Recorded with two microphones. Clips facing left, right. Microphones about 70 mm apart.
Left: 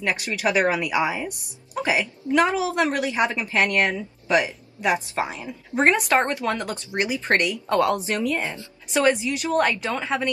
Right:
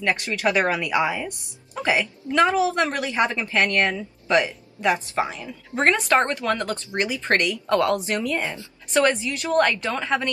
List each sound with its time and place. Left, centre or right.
0.0 s a woman's voice: centre
8.4 s a woman's voice: left
8.9 s a woman's voice: centre